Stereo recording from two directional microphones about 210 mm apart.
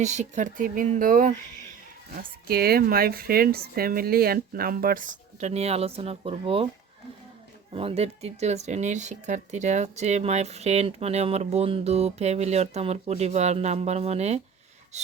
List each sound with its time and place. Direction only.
0.0 s speech: 35° right (ahead or behind)
7.7 s speech: 25° right (ahead or behind)
14.9 s a sound: 35° right (ahead or behind)